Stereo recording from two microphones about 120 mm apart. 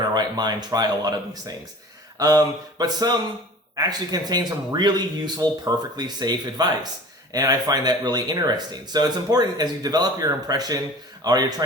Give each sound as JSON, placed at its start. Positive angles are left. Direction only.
{"t": 0.1, "sound": "speech", "side_deg": -35}